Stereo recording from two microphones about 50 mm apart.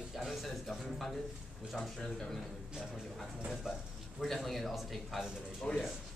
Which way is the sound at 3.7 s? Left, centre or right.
Centre.